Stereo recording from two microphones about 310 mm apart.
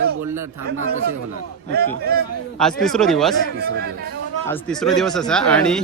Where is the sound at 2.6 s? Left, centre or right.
Centre.